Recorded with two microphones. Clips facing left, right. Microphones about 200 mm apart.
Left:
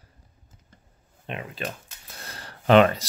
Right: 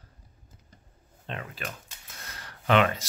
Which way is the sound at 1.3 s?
20° left (ahead or behind).